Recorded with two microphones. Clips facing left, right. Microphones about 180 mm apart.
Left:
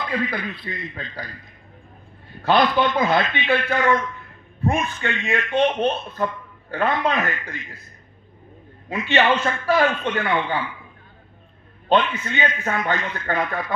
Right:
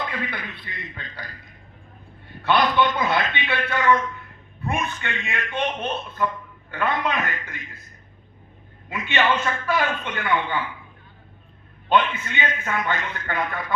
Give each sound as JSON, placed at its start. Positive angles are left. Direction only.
{"t": 0.1, "sound": "a man's voice", "side_deg": 35}
{"t": 2.4, "sound": "a man's voice", "side_deg": 35}
{"t": 8.9, "sound": "a man's voice", "side_deg": 40}
{"t": 11.9, "sound": "a man's voice", "side_deg": 40}